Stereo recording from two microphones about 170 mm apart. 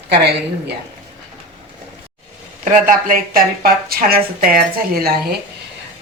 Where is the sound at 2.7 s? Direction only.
55° right (ahead or behind).